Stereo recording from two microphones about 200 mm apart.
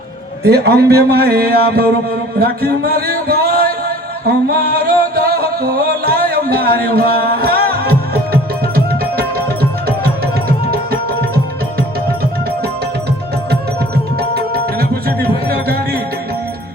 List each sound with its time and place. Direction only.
0.4 s speech: 50° right (ahead or behind)
2.4 s music: 50° right (ahead or behind)
13.5 s music: 50° right (ahead or behind)